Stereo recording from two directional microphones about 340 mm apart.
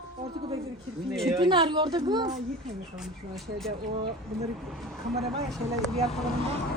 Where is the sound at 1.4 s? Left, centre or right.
Centre.